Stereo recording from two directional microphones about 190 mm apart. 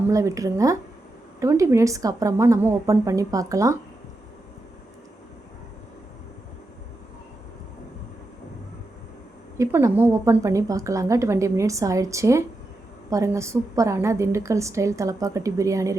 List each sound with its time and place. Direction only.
0.1 s a woman's voice: 15° right (ahead or behind)
9.6 s a woman's voice: 15° right (ahead or behind)